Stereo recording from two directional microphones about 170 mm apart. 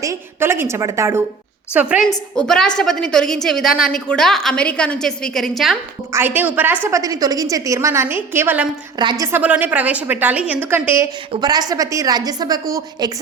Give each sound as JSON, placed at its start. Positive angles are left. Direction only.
{"t": 0.0, "sound": "a woman's voice", "side_deg": -15}
{"t": 2.0, "sound": "a woman's voice", "side_deg": 5}
{"t": 6.1, "sound": "a woman's voice", "side_deg": -15}
{"t": 9.0, "sound": "a woman's voice", "side_deg": -25}
{"t": 11.3, "sound": "a woman's voice", "side_deg": -25}